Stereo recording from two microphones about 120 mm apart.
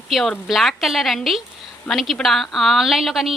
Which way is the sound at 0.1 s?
Centre (ahead or behind).